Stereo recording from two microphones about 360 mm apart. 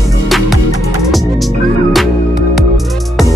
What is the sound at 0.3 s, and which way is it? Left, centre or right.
Music, centre.